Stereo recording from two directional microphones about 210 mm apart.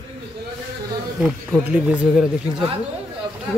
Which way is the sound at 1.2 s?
5° right (ahead or behind).